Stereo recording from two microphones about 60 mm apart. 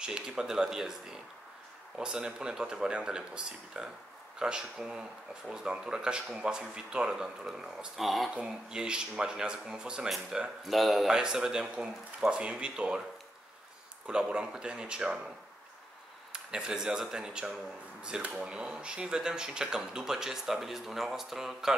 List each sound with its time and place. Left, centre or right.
0.0 s speech: centre
8.0 s speech: centre
8.4 s speech: centre
10.6 s speech: centre
11.1 s speech: centre
14.0 s speech: centre
16.4 s speech: centre